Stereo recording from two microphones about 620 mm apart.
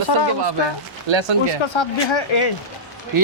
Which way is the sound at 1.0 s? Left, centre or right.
Right.